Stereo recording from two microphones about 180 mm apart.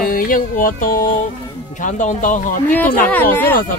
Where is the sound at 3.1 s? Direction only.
10° left (ahead or behind).